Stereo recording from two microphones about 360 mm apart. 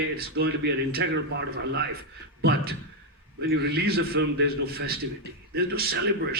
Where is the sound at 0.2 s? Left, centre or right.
Right.